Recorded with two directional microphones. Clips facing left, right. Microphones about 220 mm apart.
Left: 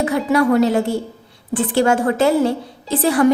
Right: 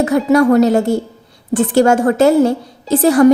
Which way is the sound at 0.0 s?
45° right (ahead or behind).